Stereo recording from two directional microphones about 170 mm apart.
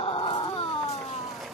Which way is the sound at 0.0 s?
35° left (ahead or behind).